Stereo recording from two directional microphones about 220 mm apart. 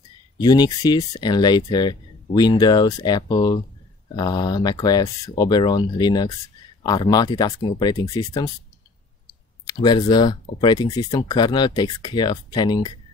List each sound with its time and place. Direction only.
0.4 s speech: 20° left (ahead or behind)
9.7 s speech: 20° left (ahead or behind)